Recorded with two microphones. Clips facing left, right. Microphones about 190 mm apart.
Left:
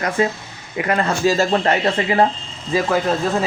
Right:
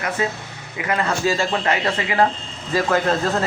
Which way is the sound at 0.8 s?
40° left (ahead or behind).